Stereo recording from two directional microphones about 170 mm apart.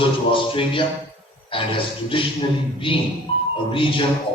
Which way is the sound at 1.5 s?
30° left (ahead or behind).